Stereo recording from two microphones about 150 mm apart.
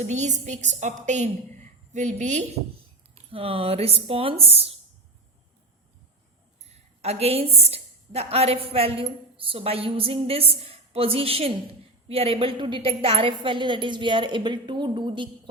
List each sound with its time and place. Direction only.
0.0 s a woman's voice: 50° right (ahead or behind)
3.3 s a woman's voice: 40° right (ahead or behind)
7.0 s a woman's voice: 45° right (ahead or behind)